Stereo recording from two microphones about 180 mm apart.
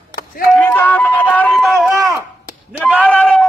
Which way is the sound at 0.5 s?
10° left (ahead or behind).